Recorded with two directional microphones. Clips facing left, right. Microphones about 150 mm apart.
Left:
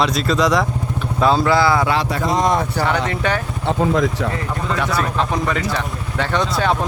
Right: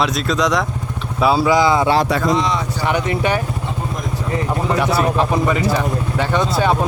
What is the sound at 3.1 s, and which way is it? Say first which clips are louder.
Speech: right 2 dB; 15° right (ahead or behind).